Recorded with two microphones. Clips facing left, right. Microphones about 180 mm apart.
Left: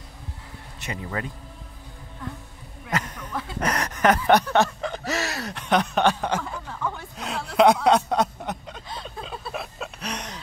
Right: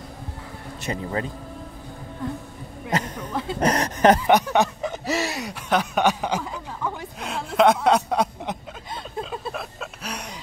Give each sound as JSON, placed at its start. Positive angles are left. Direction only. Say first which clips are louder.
{"t": 0.7, "sound": "speech", "louder": "right 4 dB", "side_deg": -35}
{"t": 2.9, "sound": "speech", "louder": "right 3 dB", "side_deg": -30}
{"t": 4.3, "sound": "a sound", "louder": "even", "side_deg": -15}
{"t": 5.3, "sound": "speech", "louder": "even", "side_deg": -10}
{"t": 7.2, "sound": "speech", "louder": "even", "side_deg": 0}
{"t": 9.2, "sound": "a sound", "louder": "right 3 dB", "side_deg": 0}